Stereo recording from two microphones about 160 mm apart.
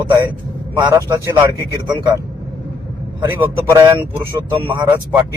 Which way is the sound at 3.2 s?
15° right (ahead or behind).